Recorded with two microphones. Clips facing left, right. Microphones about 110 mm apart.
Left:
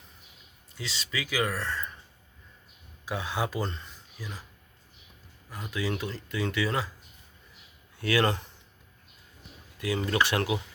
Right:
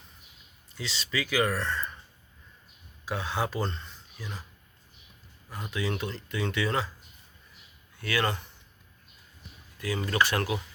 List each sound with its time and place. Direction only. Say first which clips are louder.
0.8 s speech: right 2 dB; centre (ahead or behind)
3.1 s speech: even; 10° left (ahead or behind)
5.5 s speech: even; 5° left (ahead or behind)
7.9 s speech: left 3 dB; 30° left (ahead or behind)
9.7 s speech: left 1 dB; 25° left (ahead or behind)